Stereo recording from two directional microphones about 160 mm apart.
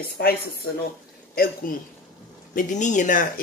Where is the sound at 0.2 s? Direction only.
70° left (ahead or behind).